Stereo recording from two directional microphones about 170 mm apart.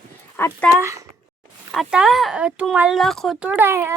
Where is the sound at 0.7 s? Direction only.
20° right (ahead or behind).